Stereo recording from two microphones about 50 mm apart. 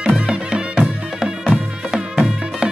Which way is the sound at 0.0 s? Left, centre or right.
Centre.